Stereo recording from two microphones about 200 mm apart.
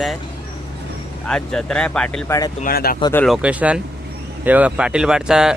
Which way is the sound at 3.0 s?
15° left (ahead or behind).